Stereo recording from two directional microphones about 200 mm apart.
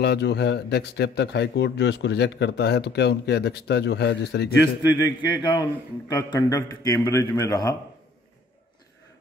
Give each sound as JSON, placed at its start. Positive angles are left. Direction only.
{"t": 0.0, "sound": "speech", "side_deg": 55}
{"t": 5.0, "sound": "a man's voice", "side_deg": 20}